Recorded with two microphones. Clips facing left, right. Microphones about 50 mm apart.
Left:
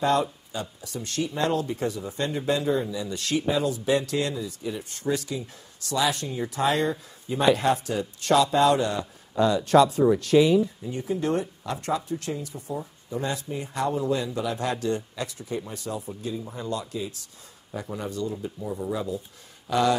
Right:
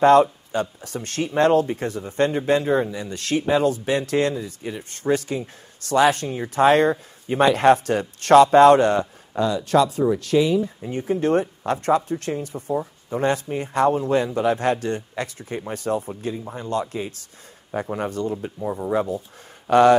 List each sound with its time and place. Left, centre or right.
0.0 s speech: right
10.8 s speech: right